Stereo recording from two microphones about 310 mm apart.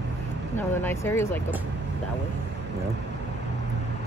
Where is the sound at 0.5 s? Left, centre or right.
Centre.